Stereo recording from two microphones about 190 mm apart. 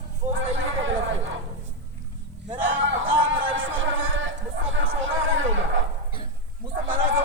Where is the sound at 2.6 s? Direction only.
75° right (ahead or behind).